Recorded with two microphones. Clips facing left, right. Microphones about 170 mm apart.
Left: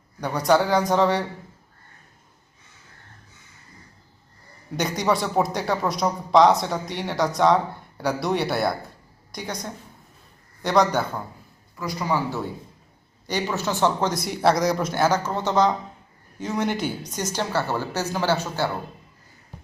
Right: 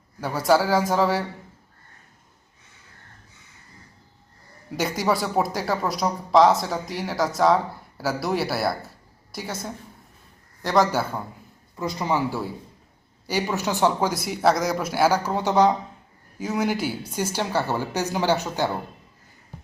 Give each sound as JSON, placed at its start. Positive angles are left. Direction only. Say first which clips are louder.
{"t": 0.2, "sound": "speech", "louder": "even", "side_deg": -5}
{"t": 4.8, "sound": "speech", "louder": "even", "side_deg": -5}
{"t": 11.8, "sound": "a man's voice", "louder": "right 1 dB", "side_deg": -20}
{"t": 13.2, "sound": "a man's voice", "louder": "right 1 dB", "side_deg": -10}